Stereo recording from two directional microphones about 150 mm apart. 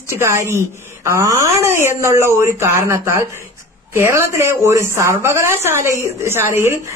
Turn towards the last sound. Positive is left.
turn(degrees=-20)  # may be behind; listen again after turning